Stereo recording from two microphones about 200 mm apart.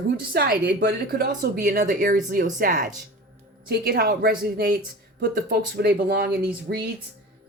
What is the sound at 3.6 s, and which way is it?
Speech, 50° right (ahead or behind).